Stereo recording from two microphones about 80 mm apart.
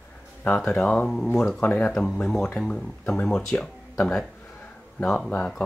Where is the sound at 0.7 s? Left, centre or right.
Centre.